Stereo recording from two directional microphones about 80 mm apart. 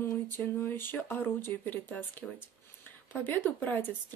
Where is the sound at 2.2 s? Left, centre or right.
Centre.